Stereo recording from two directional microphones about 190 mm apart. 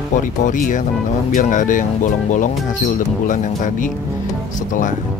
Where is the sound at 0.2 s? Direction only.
45° left (ahead or behind).